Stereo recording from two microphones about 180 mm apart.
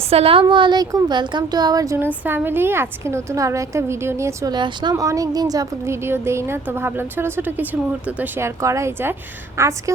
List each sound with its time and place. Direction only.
0.1 s a woman's voice: 30° right (ahead or behind); by 9.9 s 15° right (ahead or behind)